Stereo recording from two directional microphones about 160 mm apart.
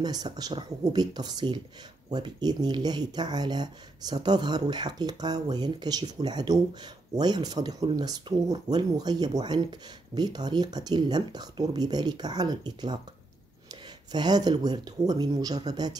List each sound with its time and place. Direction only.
0.0 s speech: 25° right (ahead or behind)